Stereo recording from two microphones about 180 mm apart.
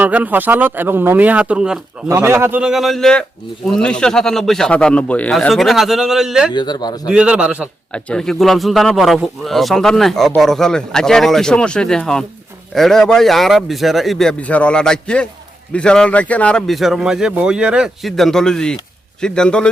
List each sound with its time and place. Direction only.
0.0 s a man's voice: 10° right (ahead or behind)
6.5 s speech: 25° left (ahead or behind)
7.1 s a man's voice: 5° right (ahead or behind)
7.9 s a man's voice: 5° left (ahead or behind)